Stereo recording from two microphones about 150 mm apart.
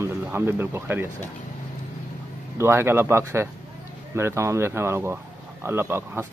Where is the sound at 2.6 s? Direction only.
15° right (ahead or behind).